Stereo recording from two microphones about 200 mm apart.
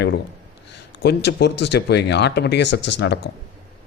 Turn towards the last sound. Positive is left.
turn(degrees=60)  # may be behind; listen again after turning